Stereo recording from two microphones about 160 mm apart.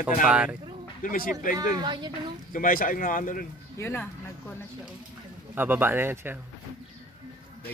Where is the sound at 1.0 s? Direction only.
65° left (ahead or behind).